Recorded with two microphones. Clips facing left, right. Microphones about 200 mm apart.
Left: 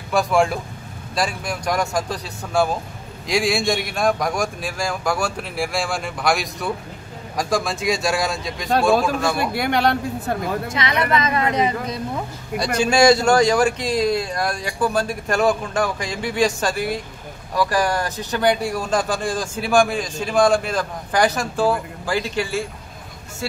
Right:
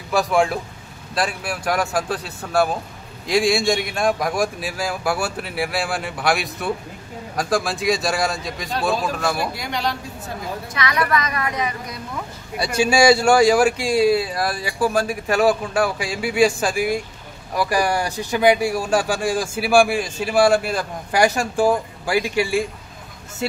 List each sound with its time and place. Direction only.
0.1 s a man's voice: centre (ahead or behind)
9.5 s speech: 60° left (ahead or behind)
10.7 s a woman's voice: 25° left (ahead or behind)
12.5 s speech: 10° right (ahead or behind)